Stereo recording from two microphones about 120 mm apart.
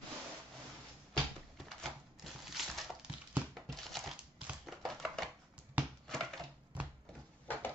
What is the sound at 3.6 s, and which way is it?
Crumpling, centre (ahead or behind).